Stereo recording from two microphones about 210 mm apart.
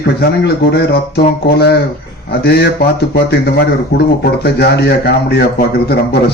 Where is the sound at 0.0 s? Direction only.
50° left (ahead or behind).